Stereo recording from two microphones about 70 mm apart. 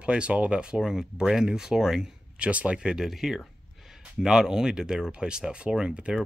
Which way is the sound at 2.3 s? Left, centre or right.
Centre.